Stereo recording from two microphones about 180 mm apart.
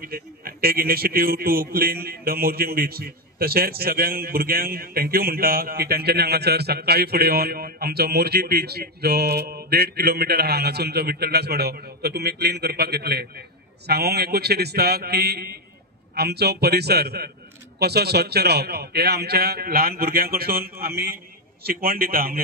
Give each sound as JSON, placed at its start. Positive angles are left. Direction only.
{"t": 0.0, "sound": "a man's voice", "side_deg": -55}